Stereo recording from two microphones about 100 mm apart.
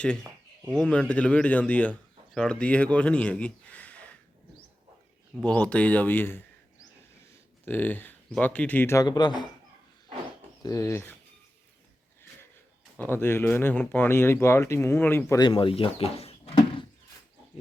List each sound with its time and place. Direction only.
0.7 s a man's voice: 10° left (ahead or behind)
5.4 s speech: 10° left (ahead or behind)
7.6 s speech: 15° left (ahead or behind)
9.0 s speech: 45° left (ahead or behind)
10.6 s speech: 35° left (ahead or behind)
13.0 s speech: 20° left (ahead or behind)
15.4 s speech: 55° left (ahead or behind); by 16.6 s 80° left